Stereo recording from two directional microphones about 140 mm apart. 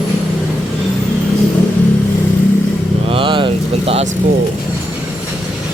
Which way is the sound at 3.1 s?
40° right (ahead or behind).